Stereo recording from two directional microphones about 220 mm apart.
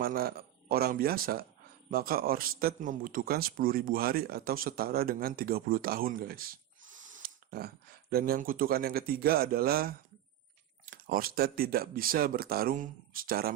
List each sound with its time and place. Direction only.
0.0 s speech: 45° right (ahead or behind)
7.2 s a sound: 45° right (ahead or behind)
8.1 s speech: 40° right (ahead or behind)